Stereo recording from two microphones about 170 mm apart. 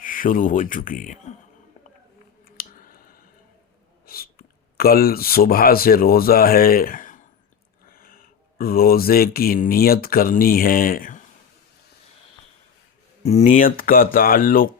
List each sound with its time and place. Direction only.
0.0 s speech: 50° left (ahead or behind)
2.6 s clicking: 55° left (ahead or behind)
4.0 s speech: 60° left (ahead or behind)
13.2 s speech: 45° left (ahead or behind)